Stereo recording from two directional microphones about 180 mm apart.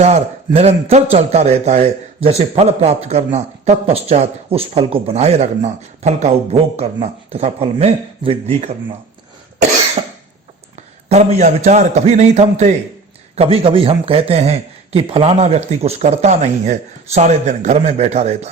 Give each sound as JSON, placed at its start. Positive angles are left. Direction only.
{"t": 0.0, "sound": "a man's voice", "side_deg": -35}
{"t": 10.8, "sound": "a man's voice", "side_deg": -40}